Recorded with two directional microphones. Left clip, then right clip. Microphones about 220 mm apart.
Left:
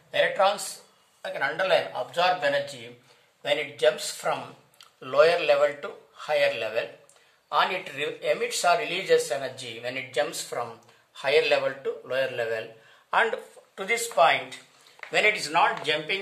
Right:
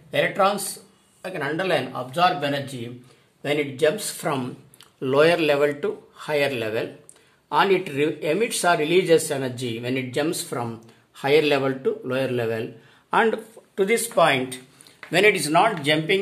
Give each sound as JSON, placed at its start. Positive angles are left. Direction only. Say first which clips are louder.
{"t": 0.1, "sound": "speech", "louder": "right 2 dB", "side_deg": -35}